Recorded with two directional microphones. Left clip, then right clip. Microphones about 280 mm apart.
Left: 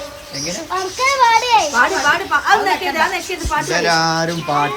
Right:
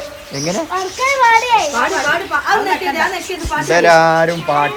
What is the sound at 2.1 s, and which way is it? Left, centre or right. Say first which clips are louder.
A child's voice: left 1 dB; centre.